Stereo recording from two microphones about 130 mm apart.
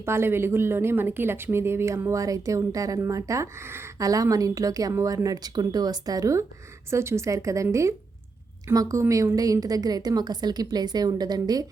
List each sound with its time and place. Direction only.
0.0 s speech: 20° right (ahead or behind)